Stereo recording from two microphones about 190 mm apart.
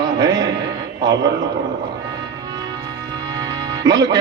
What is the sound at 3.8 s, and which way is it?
Speech, 20° right (ahead or behind).